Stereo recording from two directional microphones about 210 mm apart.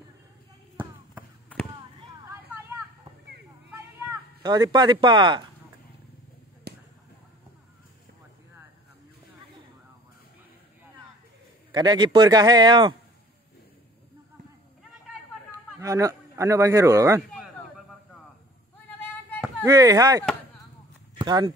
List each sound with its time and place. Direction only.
4.4 s a man's voice: 20° right (ahead or behind)
6.7 s a sound: 50° right (ahead or behind)
11.7 s a man's voice: 20° right (ahead or behind)
15.8 s speech: 15° right (ahead or behind)
19.6 s speech: 15° right (ahead or behind)